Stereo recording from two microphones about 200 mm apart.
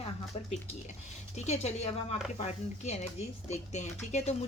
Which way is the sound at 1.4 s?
35° left (ahead or behind).